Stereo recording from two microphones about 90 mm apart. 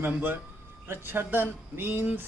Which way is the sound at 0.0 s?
20° right (ahead or behind).